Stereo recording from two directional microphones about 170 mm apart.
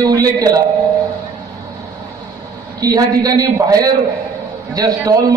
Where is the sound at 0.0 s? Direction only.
20° right (ahead or behind).